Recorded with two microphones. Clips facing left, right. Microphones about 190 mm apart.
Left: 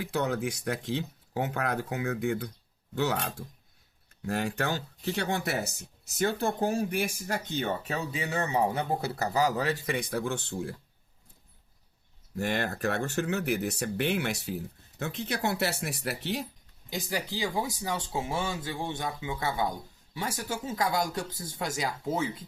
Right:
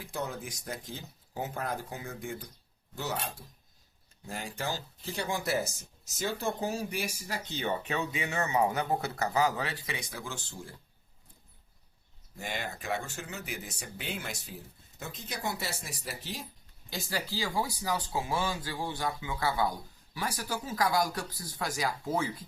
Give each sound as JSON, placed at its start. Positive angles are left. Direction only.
{"t": 0.0, "sound": "speech", "side_deg": 75}
{"t": 4.3, "sound": "speech", "side_deg": 70}
{"t": 12.4, "sound": "speech", "side_deg": 70}
{"t": 16.9, "sound": "speech", "side_deg": 15}